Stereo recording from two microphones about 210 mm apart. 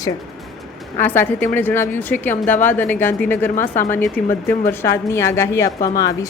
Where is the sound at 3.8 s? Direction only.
10° left (ahead or behind).